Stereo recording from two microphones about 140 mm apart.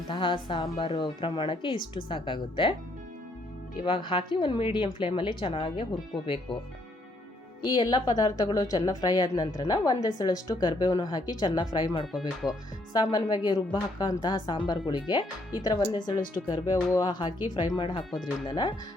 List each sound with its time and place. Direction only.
0.1 s a woman's voice: 35° left (ahead or behind)
3.8 s a woman's voice: 35° left (ahead or behind)
7.6 s a woman's voice: 30° left (ahead or behind)